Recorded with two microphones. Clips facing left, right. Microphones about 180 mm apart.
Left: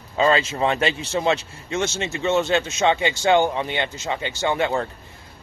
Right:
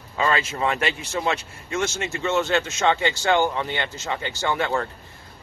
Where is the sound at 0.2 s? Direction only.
25° left (ahead or behind).